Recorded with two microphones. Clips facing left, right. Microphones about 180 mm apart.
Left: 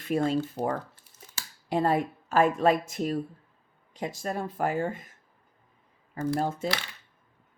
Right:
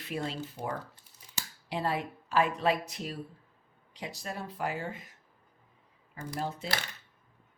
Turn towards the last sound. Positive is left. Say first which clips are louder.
# left 6 dB
turn(degrees=50)  # may be behind; listen again after turning